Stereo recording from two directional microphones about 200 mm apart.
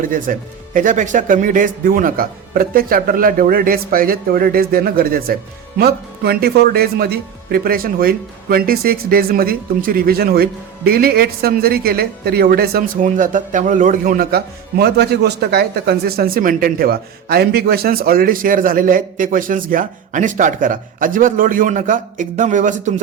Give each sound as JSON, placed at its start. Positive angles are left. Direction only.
{"t": 0.0, "sound": "speech", "side_deg": -40}